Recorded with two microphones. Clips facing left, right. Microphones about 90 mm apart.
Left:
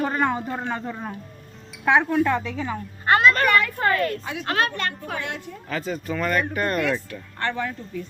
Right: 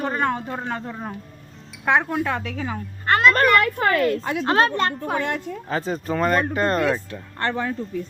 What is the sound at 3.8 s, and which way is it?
Speech, 90° right.